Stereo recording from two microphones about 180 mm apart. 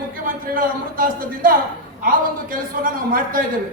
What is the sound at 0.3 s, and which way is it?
A man's voice, 50° right (ahead or behind).